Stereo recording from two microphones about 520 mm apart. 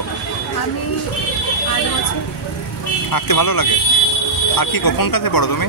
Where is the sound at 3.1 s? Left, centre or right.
Left.